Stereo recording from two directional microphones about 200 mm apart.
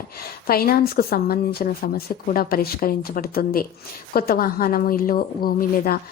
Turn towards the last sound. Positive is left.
turn(degrees=45)  # may be behind; listen again after turning